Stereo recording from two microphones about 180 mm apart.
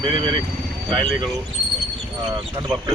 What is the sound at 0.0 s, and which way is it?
Speech, 30° right (ahead or behind).